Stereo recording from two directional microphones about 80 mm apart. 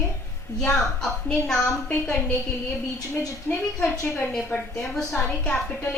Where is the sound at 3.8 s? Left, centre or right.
Left.